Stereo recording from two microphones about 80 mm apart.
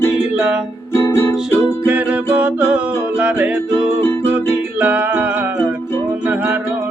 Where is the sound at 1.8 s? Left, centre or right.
Centre.